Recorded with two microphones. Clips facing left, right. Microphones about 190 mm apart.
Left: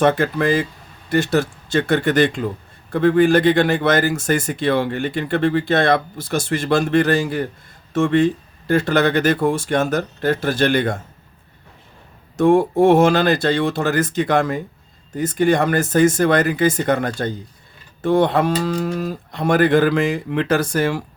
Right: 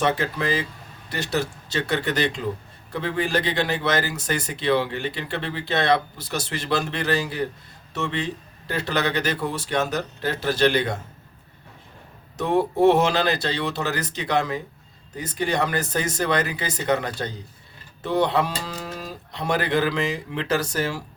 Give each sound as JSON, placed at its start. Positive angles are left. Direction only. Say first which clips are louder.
{"t": 0.0, "sound": "speech", "louder": "left 7 dB", "side_deg": 50}
{"t": 12.4, "sound": "speech", "louder": "left 6 dB", "side_deg": 50}